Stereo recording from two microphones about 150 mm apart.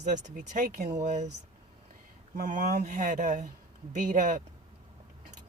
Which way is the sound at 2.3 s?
60° right (ahead or behind).